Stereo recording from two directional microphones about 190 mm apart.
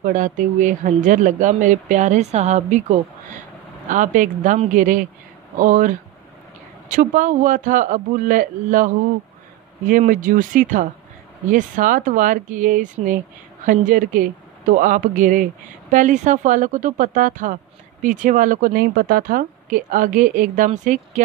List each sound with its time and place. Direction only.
0.0 s speech: 45° right (ahead or behind)